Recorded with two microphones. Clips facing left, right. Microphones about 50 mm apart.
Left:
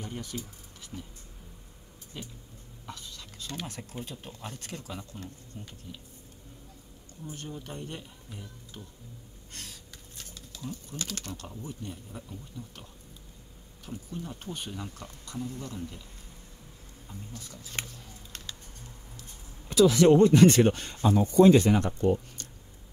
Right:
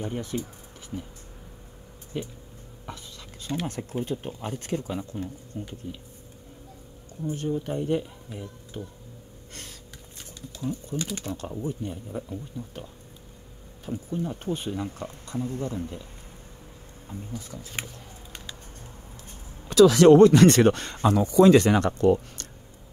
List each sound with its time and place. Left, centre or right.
0.0 s speech: right
2.9 s a sound: right
4.0 s speech: right
7.2 s speech: centre
9.5 s a sound: right
10.5 s speech: centre
13.8 s speech: right
17.1 s speech: right
17.8 s speech: centre
19.7 s speech: right